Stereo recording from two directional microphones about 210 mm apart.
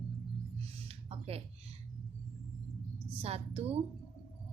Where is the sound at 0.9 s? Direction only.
30° right (ahead or behind).